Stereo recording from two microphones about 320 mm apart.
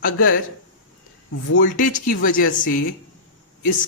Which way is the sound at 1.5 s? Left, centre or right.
Left.